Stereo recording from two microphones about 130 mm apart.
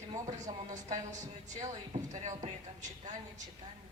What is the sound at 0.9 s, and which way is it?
A woman's voice, 65° right (ahead or behind).